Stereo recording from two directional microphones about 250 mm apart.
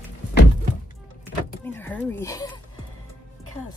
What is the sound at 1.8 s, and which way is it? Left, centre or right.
Speech, centre.